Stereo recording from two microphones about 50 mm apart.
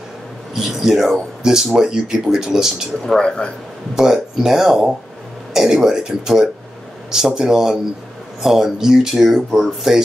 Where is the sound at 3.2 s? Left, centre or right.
Centre.